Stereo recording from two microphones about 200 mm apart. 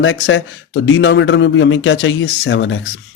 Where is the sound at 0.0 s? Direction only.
75° left (ahead or behind).